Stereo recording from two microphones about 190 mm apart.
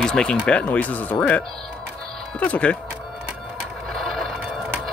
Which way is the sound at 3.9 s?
Centre (ahead or behind).